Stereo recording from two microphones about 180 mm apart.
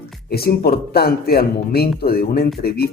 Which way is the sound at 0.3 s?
60° left (ahead or behind).